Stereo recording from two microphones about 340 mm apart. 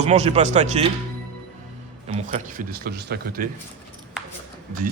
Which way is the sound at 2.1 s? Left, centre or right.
Right.